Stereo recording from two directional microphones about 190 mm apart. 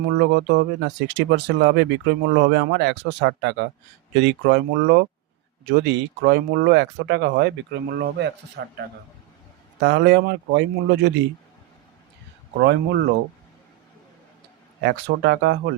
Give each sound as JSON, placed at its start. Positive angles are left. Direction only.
{"t": 0.2, "sound": "speech", "side_deg": -65}
{"t": 9.8, "sound": "speech", "side_deg": -65}
{"t": 12.5, "sound": "speech", "side_deg": -65}
{"t": 14.8, "sound": "speech", "side_deg": -65}